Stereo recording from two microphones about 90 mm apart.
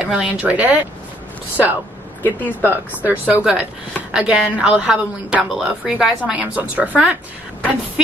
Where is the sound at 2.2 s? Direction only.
20° left (ahead or behind).